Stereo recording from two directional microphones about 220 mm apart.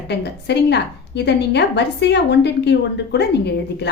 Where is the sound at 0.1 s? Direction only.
50° left (ahead or behind).